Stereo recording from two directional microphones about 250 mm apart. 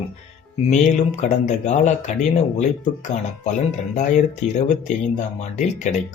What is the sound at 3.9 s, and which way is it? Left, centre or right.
Speech, left.